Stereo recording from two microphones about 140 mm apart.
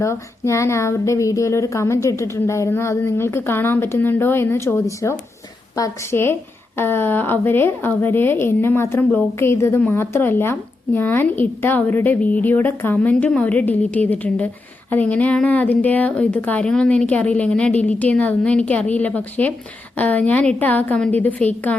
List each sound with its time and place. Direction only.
0.0 s a woman's voice: 20° left (ahead or behind)